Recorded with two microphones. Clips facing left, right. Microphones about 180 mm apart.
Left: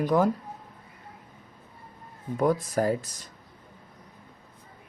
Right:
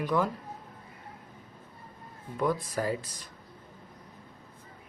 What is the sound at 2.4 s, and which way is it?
Speech, 45° left (ahead or behind).